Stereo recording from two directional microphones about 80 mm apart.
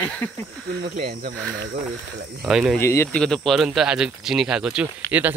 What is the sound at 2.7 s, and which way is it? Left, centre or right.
Speech, left.